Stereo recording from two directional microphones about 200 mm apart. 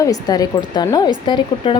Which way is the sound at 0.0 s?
20° left (ahead or behind).